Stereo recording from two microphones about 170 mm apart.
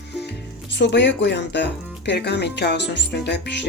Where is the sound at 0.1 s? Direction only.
85° left.